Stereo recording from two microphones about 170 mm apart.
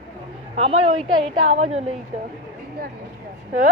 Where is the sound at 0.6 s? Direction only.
40° right (ahead or behind).